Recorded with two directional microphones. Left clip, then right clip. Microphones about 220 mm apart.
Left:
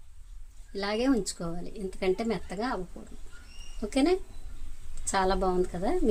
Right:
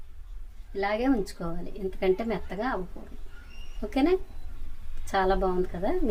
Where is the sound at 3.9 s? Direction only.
35° left (ahead or behind).